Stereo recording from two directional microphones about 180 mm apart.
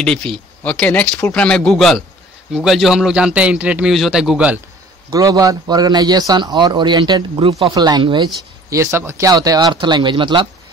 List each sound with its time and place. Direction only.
0.0 s speech: 5° left (ahead or behind)
5.1 s a man's voice: 20° right (ahead or behind)